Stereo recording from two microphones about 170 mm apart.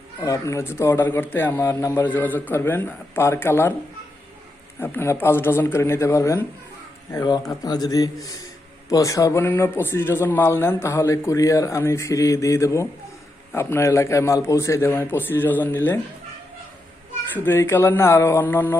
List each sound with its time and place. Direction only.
0.2 s speech: 15° left (ahead or behind)
4.8 s speech: 15° left (ahead or behind)
17.3 s speech: 15° left (ahead or behind)